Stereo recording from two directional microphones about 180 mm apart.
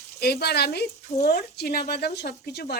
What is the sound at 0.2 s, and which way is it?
Speech, 60° left (ahead or behind).